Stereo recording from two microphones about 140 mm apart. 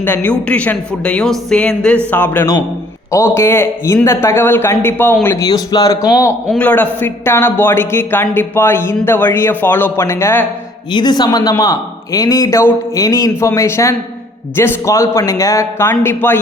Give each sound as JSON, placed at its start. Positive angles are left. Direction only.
{"t": 0.0, "sound": "a man's voice", "side_deg": 15}
{"t": 5.5, "sound": "a man's voice", "side_deg": 25}
{"t": 6.5, "sound": "speech", "side_deg": 10}
{"t": 10.9, "sound": "a man's voice", "side_deg": 30}